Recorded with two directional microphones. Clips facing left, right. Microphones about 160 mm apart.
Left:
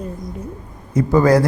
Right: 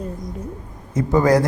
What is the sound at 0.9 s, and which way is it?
Speech, 20° right (ahead or behind).